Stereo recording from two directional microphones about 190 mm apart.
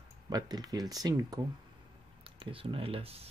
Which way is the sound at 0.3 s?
20° right (ahead or behind).